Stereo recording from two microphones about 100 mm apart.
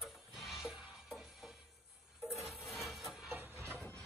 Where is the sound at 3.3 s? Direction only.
25° right (ahead or behind).